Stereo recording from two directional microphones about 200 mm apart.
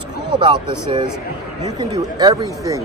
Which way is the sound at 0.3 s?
25° right (ahead or behind).